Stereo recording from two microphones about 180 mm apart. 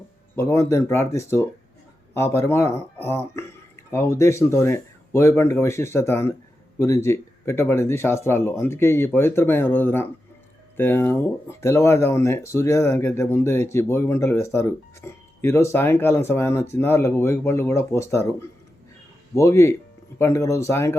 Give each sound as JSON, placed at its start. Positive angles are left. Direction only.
{"t": 0.3, "sound": "speech", "side_deg": 15}